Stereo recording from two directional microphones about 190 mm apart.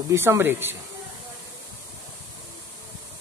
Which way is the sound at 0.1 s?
15° right (ahead or behind).